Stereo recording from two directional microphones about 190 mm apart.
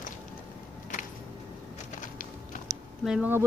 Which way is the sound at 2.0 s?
45° left (ahead or behind).